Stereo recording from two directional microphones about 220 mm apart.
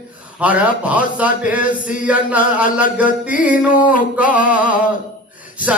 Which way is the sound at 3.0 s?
5° right (ahead or behind).